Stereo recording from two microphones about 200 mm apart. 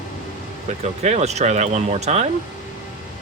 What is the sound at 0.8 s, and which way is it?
Speech, 35° right (ahead or behind).